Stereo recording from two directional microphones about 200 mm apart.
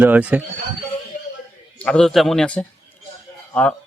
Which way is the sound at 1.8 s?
5° left (ahead or behind).